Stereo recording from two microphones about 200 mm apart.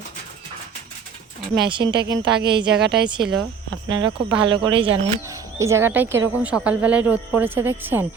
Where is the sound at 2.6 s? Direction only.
55° right (ahead or behind).